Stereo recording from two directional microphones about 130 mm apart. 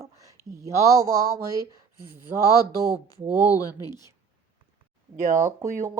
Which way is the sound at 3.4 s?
25° left (ahead or behind).